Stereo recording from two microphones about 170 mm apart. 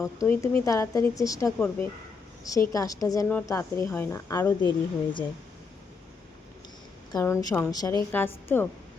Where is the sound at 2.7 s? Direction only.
20° left (ahead or behind).